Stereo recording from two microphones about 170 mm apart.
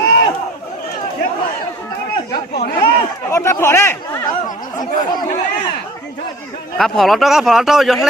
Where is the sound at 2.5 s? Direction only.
60° left (ahead or behind).